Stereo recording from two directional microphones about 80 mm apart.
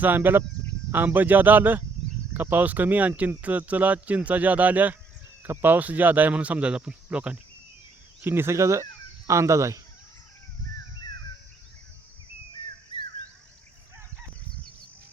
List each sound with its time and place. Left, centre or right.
0.0 s speech: right
8.2 s speech: right